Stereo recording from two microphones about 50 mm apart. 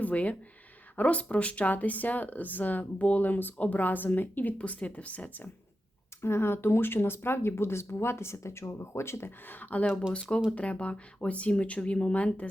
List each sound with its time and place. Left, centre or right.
0.0 s speech: left
4.5 s speech: left
6.2 s speech: left
9.5 s speech: left
10.5 s speech: left